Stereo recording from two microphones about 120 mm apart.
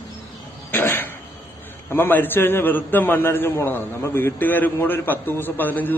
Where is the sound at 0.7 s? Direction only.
20° left (ahead or behind).